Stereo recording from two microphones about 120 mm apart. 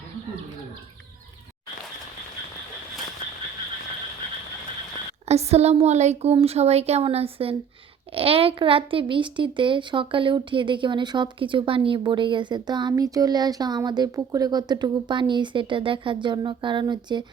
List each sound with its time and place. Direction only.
5.3 s speech: 60° right (ahead or behind); by 17.2 s 40° right (ahead or behind)